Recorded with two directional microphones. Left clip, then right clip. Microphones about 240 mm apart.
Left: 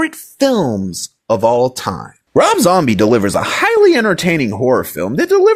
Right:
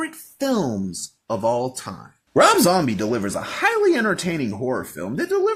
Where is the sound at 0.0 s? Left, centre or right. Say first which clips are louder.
Left 11 dB; left.